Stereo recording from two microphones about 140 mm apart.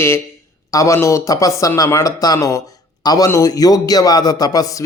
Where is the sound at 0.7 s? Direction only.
20° left (ahead or behind).